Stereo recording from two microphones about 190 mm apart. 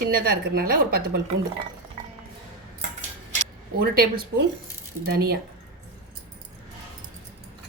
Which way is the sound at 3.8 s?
50° right (ahead or behind).